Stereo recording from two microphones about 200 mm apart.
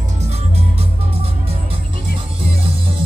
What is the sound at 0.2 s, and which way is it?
Music, 30° right (ahead or behind).